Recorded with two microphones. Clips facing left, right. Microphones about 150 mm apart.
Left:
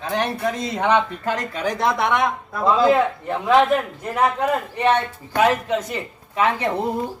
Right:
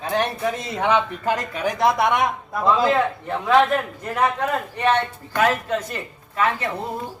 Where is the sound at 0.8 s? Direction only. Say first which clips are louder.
Left 1 dB; 20° right (ahead or behind).